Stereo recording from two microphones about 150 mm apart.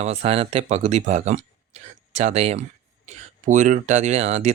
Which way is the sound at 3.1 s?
55° right (ahead or behind).